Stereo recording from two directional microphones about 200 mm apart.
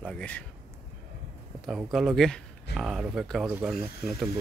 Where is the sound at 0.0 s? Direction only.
5° left (ahead or behind).